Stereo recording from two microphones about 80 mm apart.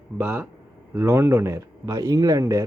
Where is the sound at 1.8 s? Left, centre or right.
Right.